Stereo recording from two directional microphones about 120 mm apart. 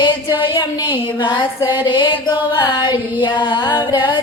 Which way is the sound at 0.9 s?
40° left (ahead or behind).